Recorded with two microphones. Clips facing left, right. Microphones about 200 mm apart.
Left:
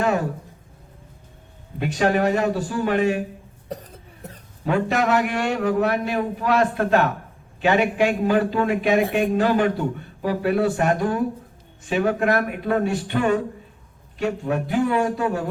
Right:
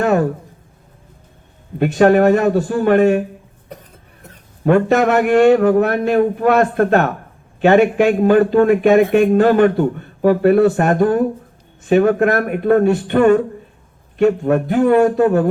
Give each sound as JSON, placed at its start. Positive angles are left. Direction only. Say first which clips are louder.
{"t": 0.0, "sound": "a sound", "louder": "right 6 dB", "side_deg": -50}
{"t": 1.8, "sound": "a man's voice", "louder": "right 9 dB", "side_deg": -55}
{"t": 4.6, "sound": "a man's voice", "louder": "right 8 dB", "side_deg": -50}